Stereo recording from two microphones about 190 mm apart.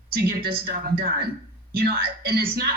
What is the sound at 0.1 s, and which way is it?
Speech, 55° right (ahead or behind).